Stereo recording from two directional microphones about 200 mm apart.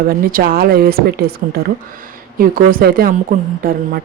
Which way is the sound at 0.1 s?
45° right (ahead or behind).